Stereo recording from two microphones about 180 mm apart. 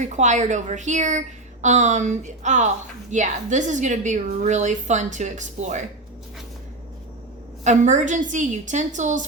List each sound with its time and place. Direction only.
0.0 s a woman's voice: 40° right (ahead or behind)
7.6 s a woman's voice: 40° right (ahead or behind)